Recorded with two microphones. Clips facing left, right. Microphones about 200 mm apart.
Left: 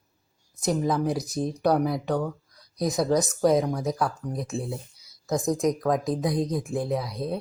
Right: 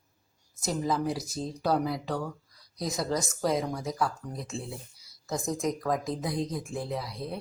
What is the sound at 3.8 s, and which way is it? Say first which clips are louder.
Speech: left 4 dB; 20° left (ahead or behind).